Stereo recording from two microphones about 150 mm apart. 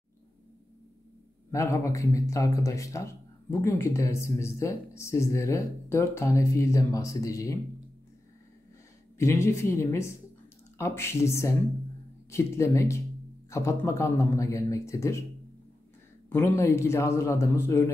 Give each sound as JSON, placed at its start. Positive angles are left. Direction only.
{"t": 1.5, "sound": "speech", "side_deg": 20}
{"t": 9.2, "sound": "a man's voice", "side_deg": 20}
{"t": 16.3, "sound": "a man's voice", "side_deg": 15}